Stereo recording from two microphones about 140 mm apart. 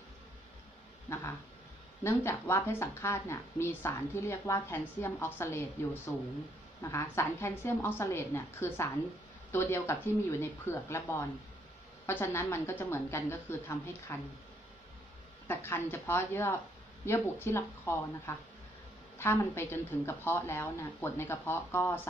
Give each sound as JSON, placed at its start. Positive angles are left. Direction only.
{"t": 1.1, "sound": "a woman's voice", "side_deg": 20}
{"t": 15.4, "sound": "a woman's voice", "side_deg": 15}